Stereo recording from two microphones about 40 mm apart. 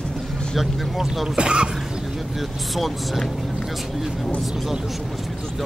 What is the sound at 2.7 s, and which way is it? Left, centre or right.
Speech, centre.